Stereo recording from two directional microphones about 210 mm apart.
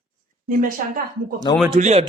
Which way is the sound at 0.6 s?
40° right (ahead or behind).